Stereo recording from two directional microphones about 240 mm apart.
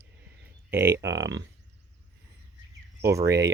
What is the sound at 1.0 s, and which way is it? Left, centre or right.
Speech, right.